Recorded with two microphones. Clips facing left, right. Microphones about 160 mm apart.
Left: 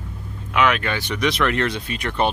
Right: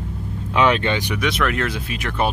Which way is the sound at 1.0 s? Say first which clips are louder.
Even; 10° right (ahead or behind).